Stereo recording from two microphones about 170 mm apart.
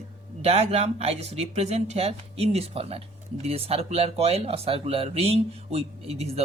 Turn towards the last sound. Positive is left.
turn(degrees=-35)  # may be behind; listen again after turning